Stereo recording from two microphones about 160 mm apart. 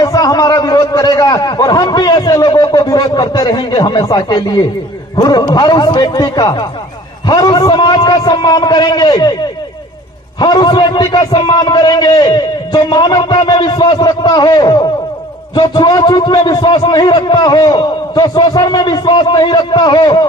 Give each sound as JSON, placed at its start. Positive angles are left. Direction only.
{"t": 0.0, "sound": "a man's voice", "side_deg": 20}
{"t": 10.4, "sound": "a man's voice", "side_deg": 25}